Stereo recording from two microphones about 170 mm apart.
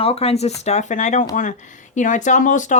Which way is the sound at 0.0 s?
35° left (ahead or behind).